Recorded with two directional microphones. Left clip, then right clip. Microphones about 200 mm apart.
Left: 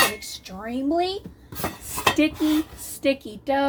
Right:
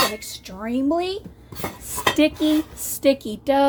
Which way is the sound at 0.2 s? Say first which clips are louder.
Right 2 dB; 25° right (ahead or behind).